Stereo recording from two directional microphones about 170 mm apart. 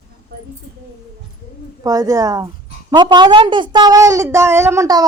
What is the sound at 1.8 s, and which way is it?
A woman's voice, 20° right (ahead or behind).